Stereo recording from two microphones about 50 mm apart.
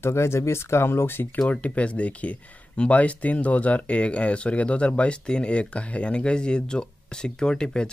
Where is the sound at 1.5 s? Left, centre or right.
Left.